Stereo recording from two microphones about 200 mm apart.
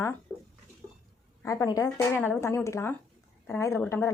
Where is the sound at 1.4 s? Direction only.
15° left (ahead or behind).